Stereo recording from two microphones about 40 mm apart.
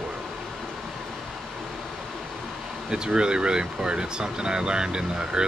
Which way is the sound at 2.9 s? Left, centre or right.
Right.